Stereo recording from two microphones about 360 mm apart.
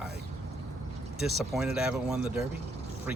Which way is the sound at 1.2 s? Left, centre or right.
Centre.